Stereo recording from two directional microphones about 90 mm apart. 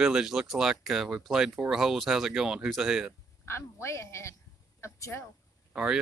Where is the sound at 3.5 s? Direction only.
30° left (ahead or behind).